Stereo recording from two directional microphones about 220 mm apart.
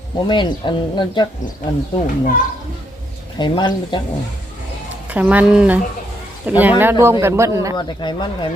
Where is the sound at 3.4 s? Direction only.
20° left (ahead or behind).